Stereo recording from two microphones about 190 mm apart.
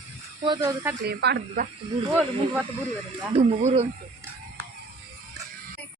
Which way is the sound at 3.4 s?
35° right (ahead or behind).